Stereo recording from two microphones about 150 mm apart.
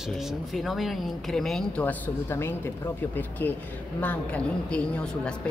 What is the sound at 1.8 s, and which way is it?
A woman's voice, 15° left (ahead or behind).